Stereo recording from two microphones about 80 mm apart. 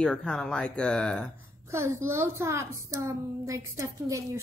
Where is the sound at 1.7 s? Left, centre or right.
Right.